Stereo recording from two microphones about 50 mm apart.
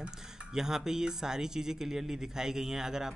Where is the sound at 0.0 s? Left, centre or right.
Centre.